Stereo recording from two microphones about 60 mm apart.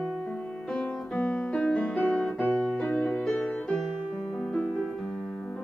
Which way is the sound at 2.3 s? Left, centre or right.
Left.